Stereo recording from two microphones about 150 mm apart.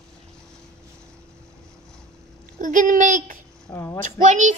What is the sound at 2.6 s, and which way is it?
Speech, 60° right (ahead or behind).